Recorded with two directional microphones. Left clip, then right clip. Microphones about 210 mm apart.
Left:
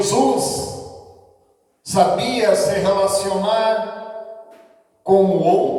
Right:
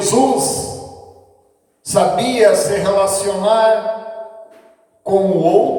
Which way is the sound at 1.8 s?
45° right (ahead or behind).